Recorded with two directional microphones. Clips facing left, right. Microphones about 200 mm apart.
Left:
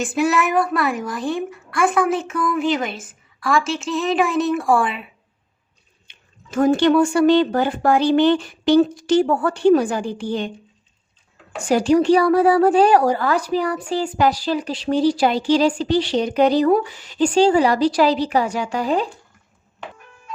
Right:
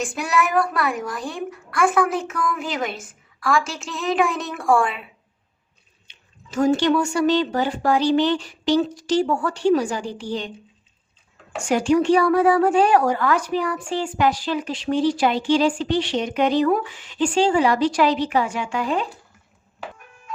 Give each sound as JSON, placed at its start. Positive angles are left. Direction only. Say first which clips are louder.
{"t": 0.0, "sound": "a child's voice", "louder": "left 4 dB", "side_deg": 0}
{"t": 6.1, "sound": "speech", "louder": "left 3 dB", "side_deg": 55}
{"t": 11.5, "sound": "a woman's voice", "louder": "left 3 dB", "side_deg": 35}